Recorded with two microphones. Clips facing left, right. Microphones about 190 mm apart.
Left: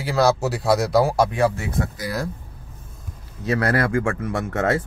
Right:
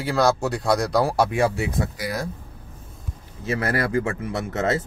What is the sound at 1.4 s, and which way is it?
Speech, 10° right (ahead or behind).